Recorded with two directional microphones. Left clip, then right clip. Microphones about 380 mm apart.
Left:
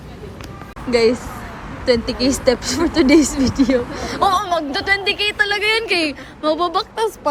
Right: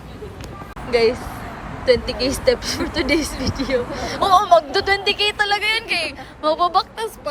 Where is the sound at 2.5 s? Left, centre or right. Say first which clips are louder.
Left 3 dB; centre.